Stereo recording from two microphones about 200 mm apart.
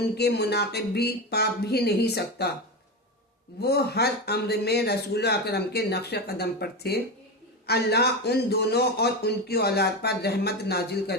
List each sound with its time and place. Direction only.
0.2 s speech: 55° left (ahead or behind)
3.6 s speech: 55° left (ahead or behind)